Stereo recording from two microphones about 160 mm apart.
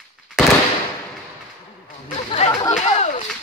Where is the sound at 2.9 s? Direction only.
40° left (ahead or behind).